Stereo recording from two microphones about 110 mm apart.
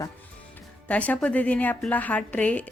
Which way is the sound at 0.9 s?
15° left (ahead or behind).